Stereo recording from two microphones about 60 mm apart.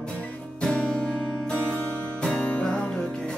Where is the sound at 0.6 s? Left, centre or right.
Centre.